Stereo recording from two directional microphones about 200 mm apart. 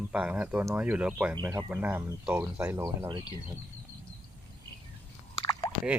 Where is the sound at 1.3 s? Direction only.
20° right (ahead or behind).